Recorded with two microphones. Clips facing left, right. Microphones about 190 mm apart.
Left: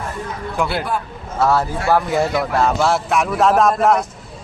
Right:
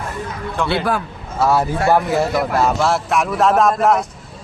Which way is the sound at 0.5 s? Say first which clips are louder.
Right 1 dB; 10° left (ahead or behind).